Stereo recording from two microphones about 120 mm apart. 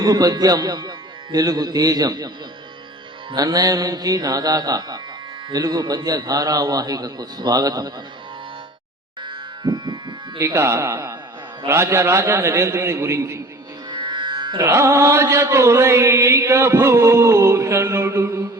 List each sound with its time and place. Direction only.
0.0 s a man's voice: 30° right (ahead or behind)
3.3 s a man's voice: 30° right (ahead or behind)
9.2 s music: 40° right (ahead or behind)
10.4 s chant: 25° right (ahead or behind)
13.9 s music: 40° right (ahead or behind)
14.6 s chant: 25° right (ahead or behind)